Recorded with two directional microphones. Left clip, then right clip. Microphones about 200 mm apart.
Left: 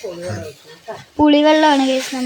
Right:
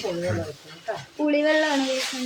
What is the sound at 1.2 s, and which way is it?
Speech, 40° left (ahead or behind).